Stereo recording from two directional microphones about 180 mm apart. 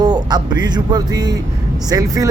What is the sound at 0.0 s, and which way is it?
Speech, 25° right (ahead or behind).